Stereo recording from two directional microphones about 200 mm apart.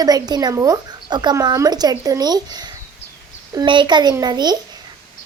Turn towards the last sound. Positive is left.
turn(degrees=-20)  # may be behind; listen again after turning